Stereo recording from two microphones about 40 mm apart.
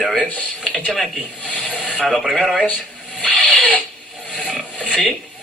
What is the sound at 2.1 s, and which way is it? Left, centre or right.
Speech, centre.